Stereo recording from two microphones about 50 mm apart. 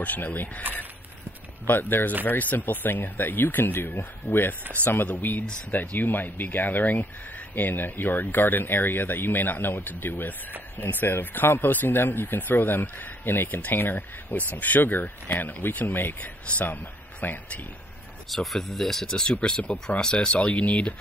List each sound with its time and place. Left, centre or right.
0.0 s speech: left
1.7 s speech: left
4.8 s speech: left
14.3 s speech: left
18.3 s speech: centre
19.6 s speech: left
20.0 s speech: centre